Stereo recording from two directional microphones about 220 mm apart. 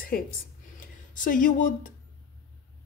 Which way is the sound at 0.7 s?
35° left (ahead or behind).